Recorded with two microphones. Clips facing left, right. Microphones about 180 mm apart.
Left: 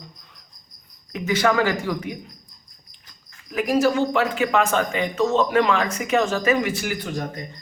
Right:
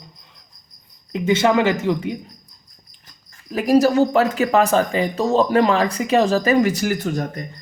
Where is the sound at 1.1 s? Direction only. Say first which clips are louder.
Right 4 dB; 25° right (ahead or behind).